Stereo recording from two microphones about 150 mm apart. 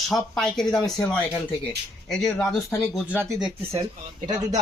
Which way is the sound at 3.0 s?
15° right (ahead or behind).